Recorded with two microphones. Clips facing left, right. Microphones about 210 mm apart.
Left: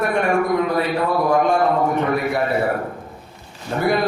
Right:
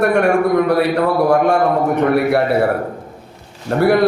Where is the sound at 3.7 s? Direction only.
65° right (ahead or behind).